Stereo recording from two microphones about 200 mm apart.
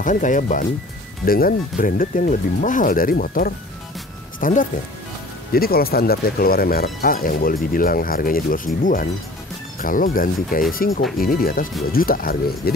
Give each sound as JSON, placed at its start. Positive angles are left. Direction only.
{"t": 0.0, "sound": "speech", "side_deg": 40}